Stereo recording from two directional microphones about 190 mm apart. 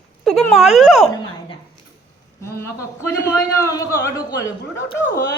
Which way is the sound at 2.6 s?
15° left (ahead or behind).